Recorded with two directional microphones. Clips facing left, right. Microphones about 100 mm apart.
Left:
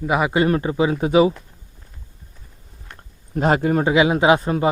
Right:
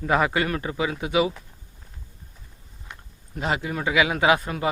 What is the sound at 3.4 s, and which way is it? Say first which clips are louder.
Speech: left 9 dB; 45° left (ahead or behind).